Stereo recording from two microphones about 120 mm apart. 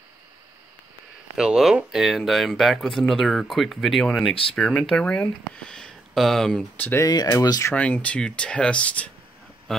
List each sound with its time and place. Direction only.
1.3 s speech: 5° right (ahead or behind)
6.8 s speech: 20° left (ahead or behind)
7.1 s speech: 30° left (ahead or behind)
7.7 s speech: 10° left (ahead or behind)